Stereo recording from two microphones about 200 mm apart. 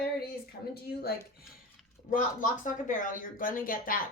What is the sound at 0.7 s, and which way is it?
Speech, 50° left (ahead or behind).